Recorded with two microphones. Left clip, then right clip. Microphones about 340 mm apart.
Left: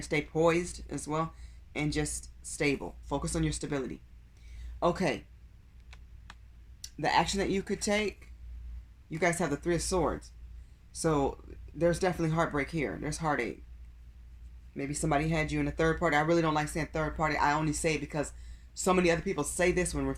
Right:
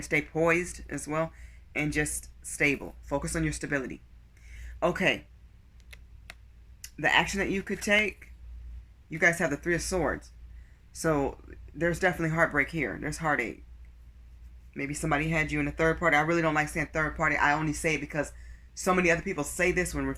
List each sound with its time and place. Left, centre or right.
0.0 s speech: centre
7.0 s speech: centre
9.1 s speech: centre
10.9 s speech: centre
14.8 s speech: centre